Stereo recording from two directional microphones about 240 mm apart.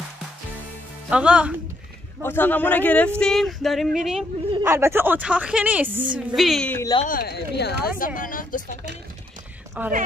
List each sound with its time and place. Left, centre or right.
1.1 s speech: centre
2.2 s a woman's voice: centre
7.0 s speech: left
9.8 s a woman's voice: centre